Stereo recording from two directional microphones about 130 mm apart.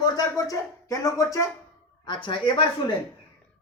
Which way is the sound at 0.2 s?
25° left (ahead or behind).